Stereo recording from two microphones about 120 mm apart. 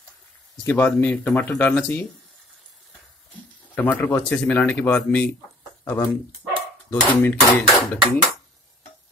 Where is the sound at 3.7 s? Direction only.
15° left (ahead or behind).